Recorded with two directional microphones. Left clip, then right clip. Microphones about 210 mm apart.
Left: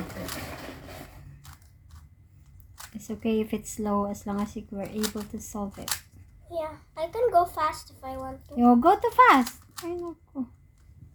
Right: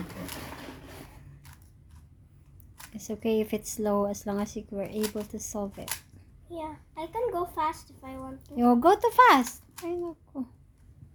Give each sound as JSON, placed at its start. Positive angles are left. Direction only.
{"t": 2.9, "sound": "speech", "side_deg": -25}
{"t": 4.9, "sound": "speech", "side_deg": -5}
{"t": 5.5, "sound": "speech", "side_deg": -25}
{"t": 6.5, "sound": "a child's voice", "side_deg": 0}
{"t": 8.5, "sound": "a child's voice", "side_deg": -25}